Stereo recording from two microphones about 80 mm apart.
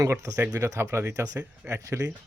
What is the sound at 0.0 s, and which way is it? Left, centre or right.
Speech, right.